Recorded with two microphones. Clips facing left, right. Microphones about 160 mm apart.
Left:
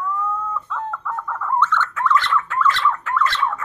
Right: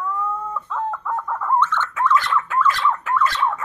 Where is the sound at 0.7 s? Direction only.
15° right (ahead or behind).